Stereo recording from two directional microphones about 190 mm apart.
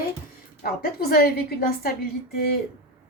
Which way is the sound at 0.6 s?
50° left (ahead or behind).